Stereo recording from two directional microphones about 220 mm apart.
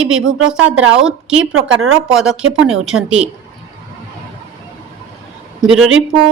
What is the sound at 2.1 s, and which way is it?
A woman's voice, 5° right (ahead or behind).